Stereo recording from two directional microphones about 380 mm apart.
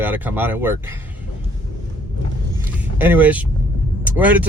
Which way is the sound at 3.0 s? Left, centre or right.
Centre.